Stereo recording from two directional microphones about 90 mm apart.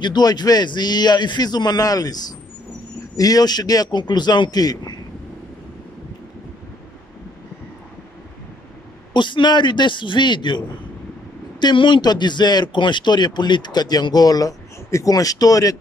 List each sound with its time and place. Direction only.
0.0 s speech: 50° left (ahead or behind)
3.2 s speech: 45° left (ahead or behind)
9.1 s a man's voice: 60° left (ahead or behind)
11.6 s speech: 65° left (ahead or behind); by 15.8 s 40° left (ahead or behind)